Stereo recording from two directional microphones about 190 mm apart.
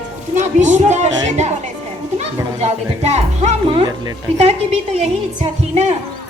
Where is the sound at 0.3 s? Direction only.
40° right (ahead or behind).